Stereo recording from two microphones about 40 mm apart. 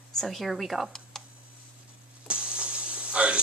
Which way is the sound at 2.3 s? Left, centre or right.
Right.